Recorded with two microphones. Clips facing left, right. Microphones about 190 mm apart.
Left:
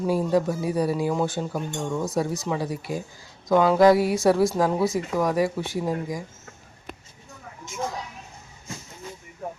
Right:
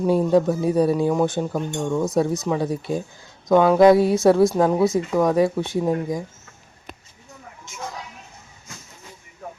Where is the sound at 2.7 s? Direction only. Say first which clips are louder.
Right 5 dB; 25° right (ahead or behind).